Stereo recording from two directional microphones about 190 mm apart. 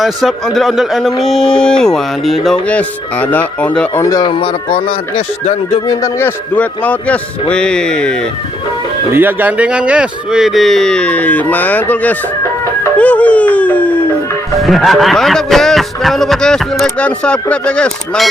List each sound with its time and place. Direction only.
0.0 s speech: centre (ahead or behind); by 5.8 s 30° left (ahead or behind)
5.9 s speech: 15° left (ahead or behind)
9.1 s speech: 10° right (ahead or behind)